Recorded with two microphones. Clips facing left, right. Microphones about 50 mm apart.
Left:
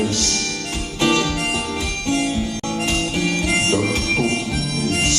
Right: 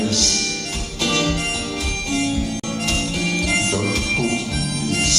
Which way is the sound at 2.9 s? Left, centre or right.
Left.